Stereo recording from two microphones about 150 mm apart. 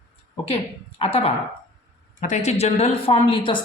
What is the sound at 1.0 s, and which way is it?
Speech, 40° left (ahead or behind).